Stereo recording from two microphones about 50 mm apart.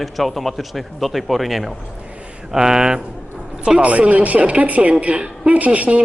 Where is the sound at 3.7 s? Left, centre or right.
Right.